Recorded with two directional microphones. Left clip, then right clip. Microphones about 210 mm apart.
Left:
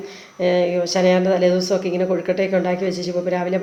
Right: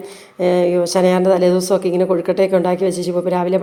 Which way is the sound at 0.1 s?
35° right (ahead or behind).